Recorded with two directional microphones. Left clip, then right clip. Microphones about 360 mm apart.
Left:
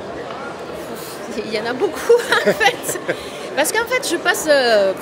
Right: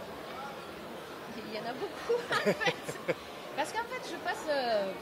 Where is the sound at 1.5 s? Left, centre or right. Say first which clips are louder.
Left 17 dB; centre.